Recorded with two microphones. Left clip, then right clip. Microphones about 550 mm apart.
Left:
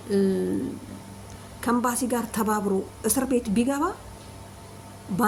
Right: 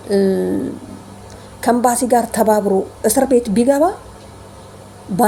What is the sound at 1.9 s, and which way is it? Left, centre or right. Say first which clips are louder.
Speech: right 12 dB; left.